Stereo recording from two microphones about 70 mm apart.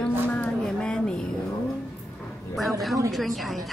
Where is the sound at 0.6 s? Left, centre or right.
Centre.